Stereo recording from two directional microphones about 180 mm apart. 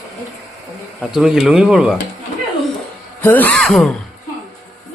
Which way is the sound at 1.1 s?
5° right (ahead or behind).